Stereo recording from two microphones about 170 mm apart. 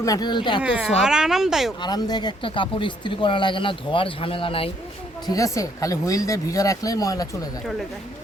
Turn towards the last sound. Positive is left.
turn(degrees=20)  # may be behind; listen again after turning